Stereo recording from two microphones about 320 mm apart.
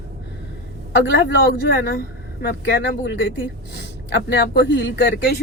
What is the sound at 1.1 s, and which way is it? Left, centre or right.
A man's voice, left.